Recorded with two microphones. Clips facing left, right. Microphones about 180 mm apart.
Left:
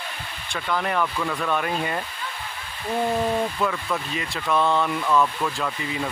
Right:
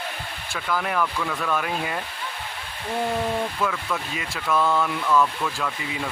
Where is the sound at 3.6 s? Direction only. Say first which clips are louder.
Left 1 dB; centre (ahead or behind).